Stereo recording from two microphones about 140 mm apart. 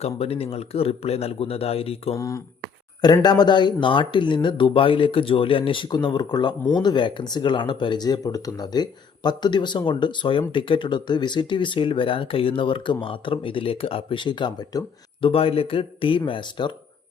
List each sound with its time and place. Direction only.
0.0 s speech: 45° left (ahead or behind)
2.1 s speech: 25° left (ahead or behind)
15.3 s speech: 45° left (ahead or behind)